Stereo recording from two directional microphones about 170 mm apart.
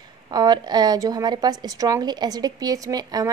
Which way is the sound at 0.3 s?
25° right (ahead or behind).